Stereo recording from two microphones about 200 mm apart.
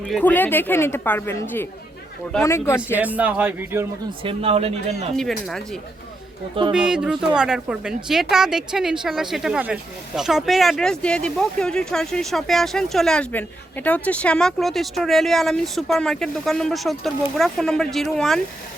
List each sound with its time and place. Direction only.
0.1 s speech: 10° left (ahead or behind)
3.0 s a man's voice: 10° right (ahead or behind)
4.2 s speech: 30° right (ahead or behind)
5.1 s speech: centre (ahead or behind)
6.7 s speech: 5° right (ahead or behind)